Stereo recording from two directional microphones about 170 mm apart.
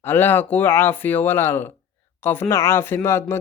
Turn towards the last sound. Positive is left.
turn(degrees=15)  # may be behind; listen again after turning